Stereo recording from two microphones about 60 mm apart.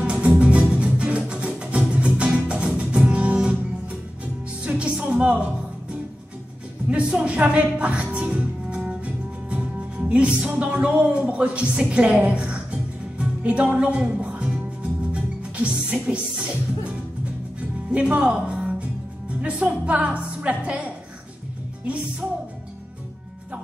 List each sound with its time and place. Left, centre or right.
0.0 s music: centre
4.6 s music: centre
6.9 s speech: centre
13.2 s music: right
17.9 s a woman's voice: centre